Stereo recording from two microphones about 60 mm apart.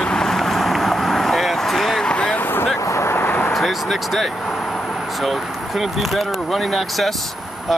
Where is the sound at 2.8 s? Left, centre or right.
Left.